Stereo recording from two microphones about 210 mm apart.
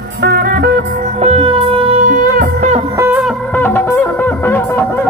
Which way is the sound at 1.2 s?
25° right (ahead or behind).